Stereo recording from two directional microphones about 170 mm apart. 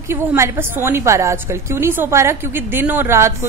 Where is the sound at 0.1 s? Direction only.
15° right (ahead or behind).